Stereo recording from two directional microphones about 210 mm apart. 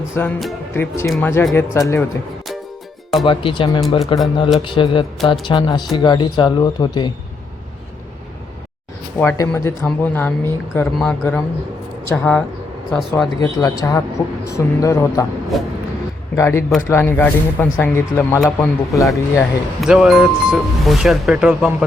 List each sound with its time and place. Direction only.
0.0 s speech: 10° left (ahead or behind)
3.2 s speech: 25° left (ahead or behind)
9.1 s speech: 10° left (ahead or behind)
13.4 s speech: 15° left (ahead or behind)
15.5 s speech: centre (ahead or behind)
16.3 s speech: 15° left (ahead or behind)
19.0 s speech: centre (ahead or behind)